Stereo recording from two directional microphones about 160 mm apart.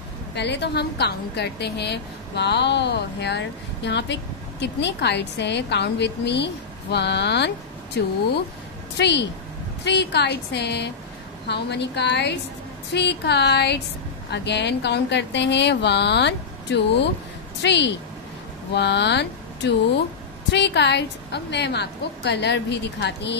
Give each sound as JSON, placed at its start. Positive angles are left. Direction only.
{"t": 0.3, "sound": "a woman's voice", "side_deg": 90}
{"t": 8.9, "sound": "a woman's voice", "side_deg": 90}